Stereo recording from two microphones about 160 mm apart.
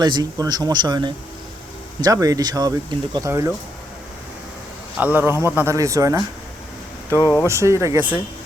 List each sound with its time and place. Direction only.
0.0 s speech: 25° right (ahead or behind)
4.9 s speech: 10° right (ahead or behind)
5.3 s a man's voice: 20° left (ahead or behind)
5.5 s speech: 20° right (ahead or behind)
7.2 s speech: 15° left (ahead or behind)
7.4 s speech: 15° right (ahead or behind)